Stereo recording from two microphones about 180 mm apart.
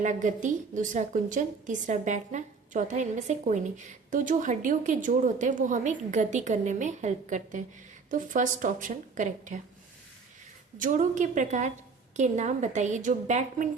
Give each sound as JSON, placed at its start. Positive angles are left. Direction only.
{"t": 0.0, "sound": "a woman's voice", "side_deg": -45}
{"t": 10.8, "sound": "a woman's voice", "side_deg": -45}